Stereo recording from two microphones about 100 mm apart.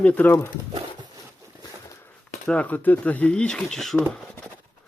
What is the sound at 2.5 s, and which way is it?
Speech, 15° left (ahead or behind).